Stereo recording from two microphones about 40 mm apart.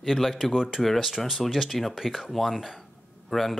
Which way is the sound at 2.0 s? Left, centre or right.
Centre.